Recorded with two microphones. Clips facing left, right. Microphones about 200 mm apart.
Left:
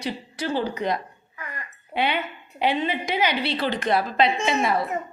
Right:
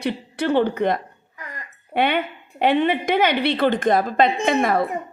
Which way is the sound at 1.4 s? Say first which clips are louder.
Even; 45° right (ahead or behind).